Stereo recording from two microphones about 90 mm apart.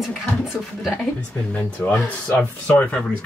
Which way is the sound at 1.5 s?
15° left (ahead or behind).